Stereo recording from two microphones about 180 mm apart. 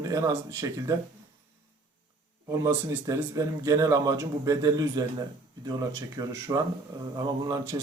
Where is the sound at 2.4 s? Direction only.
15° right (ahead or behind).